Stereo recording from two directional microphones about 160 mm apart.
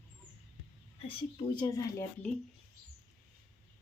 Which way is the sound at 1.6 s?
20° left (ahead or behind).